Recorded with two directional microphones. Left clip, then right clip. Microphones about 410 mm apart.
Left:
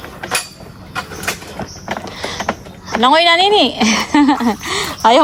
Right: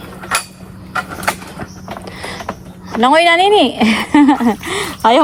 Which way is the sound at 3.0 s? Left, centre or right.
Centre.